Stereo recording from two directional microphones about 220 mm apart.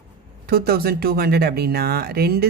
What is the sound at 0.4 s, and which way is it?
Speech, 45° right (ahead or behind).